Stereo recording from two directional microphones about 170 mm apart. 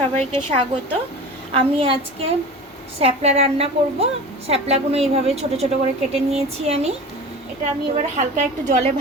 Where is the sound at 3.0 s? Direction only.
40° right (ahead or behind).